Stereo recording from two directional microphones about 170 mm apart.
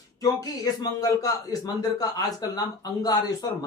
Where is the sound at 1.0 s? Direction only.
20° left (ahead or behind).